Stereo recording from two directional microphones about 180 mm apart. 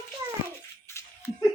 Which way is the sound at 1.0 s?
15° left (ahead or behind).